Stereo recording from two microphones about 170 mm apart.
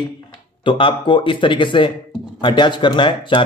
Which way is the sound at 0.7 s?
30° left (ahead or behind).